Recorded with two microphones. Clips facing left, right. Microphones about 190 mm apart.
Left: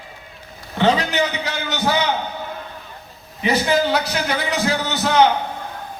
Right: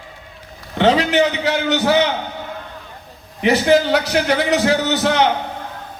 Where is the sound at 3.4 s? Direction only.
80° right.